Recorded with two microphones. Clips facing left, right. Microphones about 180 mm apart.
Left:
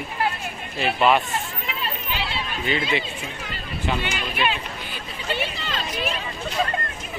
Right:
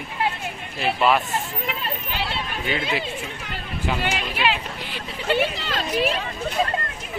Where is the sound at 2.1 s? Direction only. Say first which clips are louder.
Right 1 dB; 55° right (ahead or behind).